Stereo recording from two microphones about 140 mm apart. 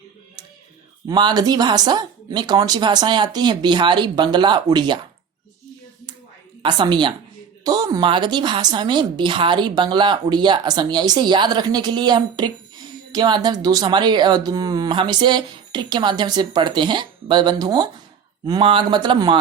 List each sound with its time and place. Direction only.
1.0 s a woman's voice: 30° right (ahead or behind)
6.6 s a woman's voice: 35° right (ahead or behind)